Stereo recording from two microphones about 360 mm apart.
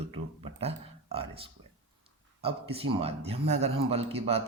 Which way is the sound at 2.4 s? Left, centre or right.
Centre.